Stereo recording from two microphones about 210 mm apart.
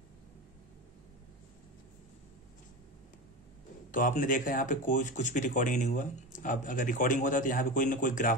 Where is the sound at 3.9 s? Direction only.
40° left (ahead or behind).